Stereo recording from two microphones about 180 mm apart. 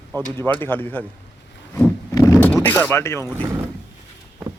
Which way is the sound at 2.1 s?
20° left (ahead or behind).